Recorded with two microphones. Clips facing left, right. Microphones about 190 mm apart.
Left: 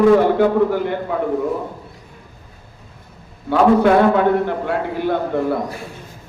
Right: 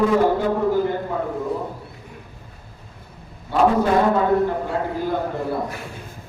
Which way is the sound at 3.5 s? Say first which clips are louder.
Left 5 dB; 70° left (ahead or behind).